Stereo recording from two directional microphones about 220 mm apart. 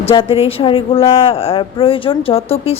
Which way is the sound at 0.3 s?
25° left (ahead or behind).